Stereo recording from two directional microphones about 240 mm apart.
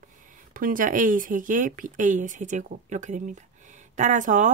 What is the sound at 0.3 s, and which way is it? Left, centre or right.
Speech, right.